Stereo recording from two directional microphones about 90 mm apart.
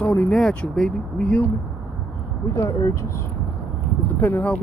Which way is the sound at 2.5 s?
35° left (ahead or behind).